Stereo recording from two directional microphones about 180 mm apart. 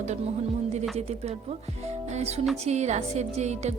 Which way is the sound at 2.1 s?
35° right (ahead or behind).